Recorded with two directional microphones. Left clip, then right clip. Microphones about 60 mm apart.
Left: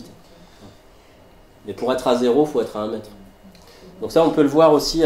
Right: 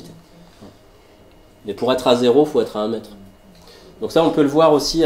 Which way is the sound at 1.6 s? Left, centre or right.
Right.